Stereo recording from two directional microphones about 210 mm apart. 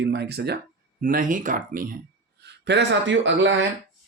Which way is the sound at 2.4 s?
55° right (ahead or behind).